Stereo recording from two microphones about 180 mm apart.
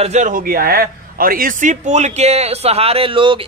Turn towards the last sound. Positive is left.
turn(degrees=-30)  # may be behind; listen again after turning